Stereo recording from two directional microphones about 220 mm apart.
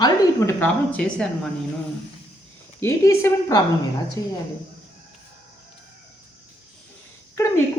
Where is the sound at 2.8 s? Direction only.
10° left (ahead or behind).